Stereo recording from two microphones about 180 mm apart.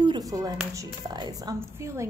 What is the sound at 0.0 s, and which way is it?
Clapping, 20° right (ahead or behind).